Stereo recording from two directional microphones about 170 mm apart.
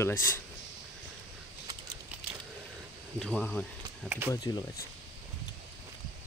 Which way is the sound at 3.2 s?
5° left (ahead or behind).